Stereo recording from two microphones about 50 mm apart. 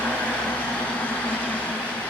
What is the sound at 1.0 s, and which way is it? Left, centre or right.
Vehicle, left.